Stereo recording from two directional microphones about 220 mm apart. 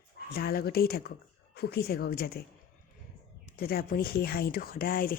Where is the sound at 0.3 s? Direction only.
45° left (ahead or behind).